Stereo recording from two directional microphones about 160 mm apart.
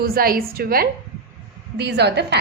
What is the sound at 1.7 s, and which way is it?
Speech, 90° right.